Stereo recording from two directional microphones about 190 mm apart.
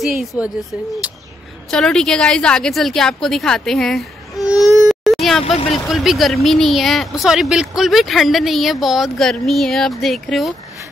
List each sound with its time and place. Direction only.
0.0 s speech: centre (ahead or behind)
1.7 s speech: 5° left (ahead or behind)
4.8 s a sound: centre (ahead or behind)
5.4 s speech: 30° left (ahead or behind)
5.9 s speech: centre (ahead or behind)